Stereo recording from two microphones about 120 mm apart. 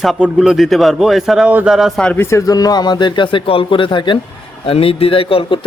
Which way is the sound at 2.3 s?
25° left (ahead or behind).